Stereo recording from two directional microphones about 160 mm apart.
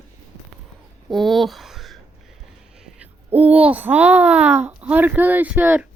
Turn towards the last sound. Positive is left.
turn(degrees=-10)  # may be behind; listen again after turning